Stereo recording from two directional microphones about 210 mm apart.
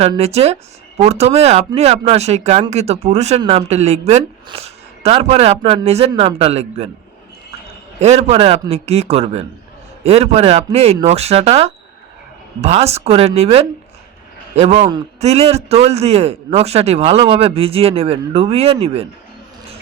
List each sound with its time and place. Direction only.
0.0 s a man's voice: 30° right (ahead or behind)
7.9 s a man's voice: 30° right (ahead or behind)